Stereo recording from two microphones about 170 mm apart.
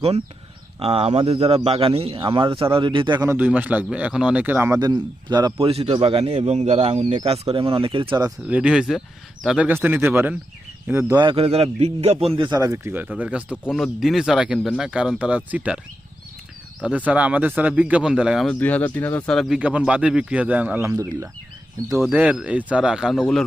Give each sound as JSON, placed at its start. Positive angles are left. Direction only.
{"t": 0.8, "sound": "a man's voice", "side_deg": -40}
{"t": 3.3, "sound": "a man's voice", "side_deg": -10}
{"t": 8.4, "sound": "speech", "side_deg": -5}
{"t": 11.2, "sound": "a man's voice", "side_deg": -30}
{"t": 12.4, "sound": "speech", "side_deg": -20}
{"t": 17.1, "sound": "speech", "side_deg": -10}
{"t": 18.6, "sound": "speech", "side_deg": 10}